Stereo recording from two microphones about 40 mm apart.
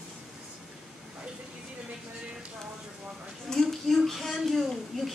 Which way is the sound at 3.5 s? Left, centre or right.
Centre.